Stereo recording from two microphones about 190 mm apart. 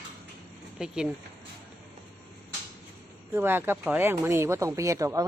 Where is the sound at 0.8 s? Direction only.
5° right (ahead or behind).